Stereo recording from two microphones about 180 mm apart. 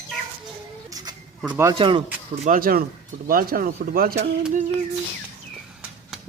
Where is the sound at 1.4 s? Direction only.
10° right (ahead or behind).